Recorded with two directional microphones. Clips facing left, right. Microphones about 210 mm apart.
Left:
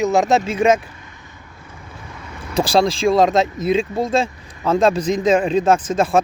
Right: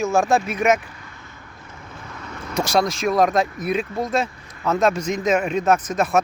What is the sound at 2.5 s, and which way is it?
Speech, 30° left (ahead or behind).